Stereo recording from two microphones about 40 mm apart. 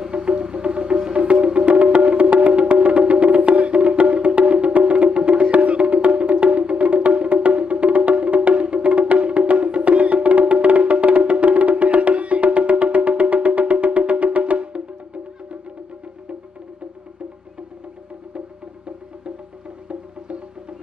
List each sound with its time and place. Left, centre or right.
0.1 s music: right
19.9 s music: right